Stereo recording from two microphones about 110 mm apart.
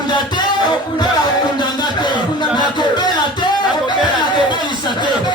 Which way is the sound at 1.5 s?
40° left (ahead or behind).